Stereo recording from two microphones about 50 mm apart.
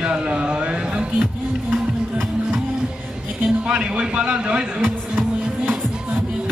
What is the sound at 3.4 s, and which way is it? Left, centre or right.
A man's voice, centre.